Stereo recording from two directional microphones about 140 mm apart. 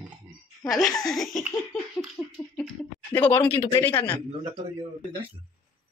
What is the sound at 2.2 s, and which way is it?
A man's voice, 15° left (ahead or behind).